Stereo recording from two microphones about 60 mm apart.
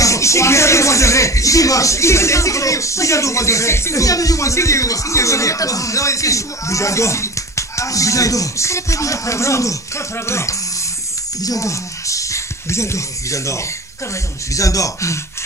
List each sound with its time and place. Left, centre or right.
0.0 s speech: left
4.0 s speech: left
11.4 s speech: left
14.5 s speech: left